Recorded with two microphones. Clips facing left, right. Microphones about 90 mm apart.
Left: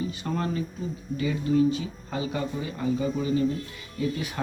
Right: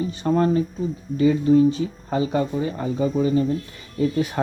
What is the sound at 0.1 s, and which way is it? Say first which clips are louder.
Speech: right 10 dB; 35° right (ahead or behind).